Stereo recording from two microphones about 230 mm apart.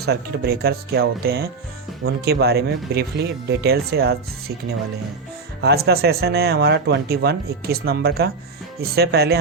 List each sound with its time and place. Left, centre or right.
0.0 s speech: right
5.6 s speech: right